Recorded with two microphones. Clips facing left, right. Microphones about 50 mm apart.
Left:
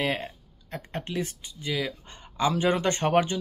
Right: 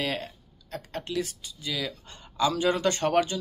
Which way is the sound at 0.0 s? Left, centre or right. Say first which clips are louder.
Left 2 dB; left.